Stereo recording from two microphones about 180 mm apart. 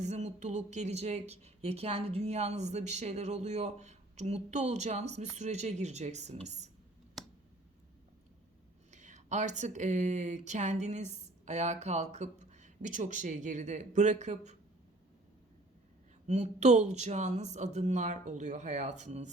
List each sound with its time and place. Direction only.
0.0 s a woman's voice: 40° right (ahead or behind)
8.9 s speech: 40° right (ahead or behind)
16.2 s a woman's voice: 40° right (ahead or behind)